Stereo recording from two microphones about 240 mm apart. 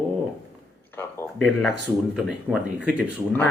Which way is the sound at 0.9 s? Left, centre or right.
Centre.